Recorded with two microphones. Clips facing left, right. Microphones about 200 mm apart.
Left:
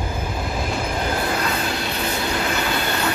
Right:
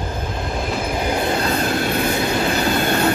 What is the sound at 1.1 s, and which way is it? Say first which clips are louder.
Train: right 5 dB; 25° right (ahead or behind).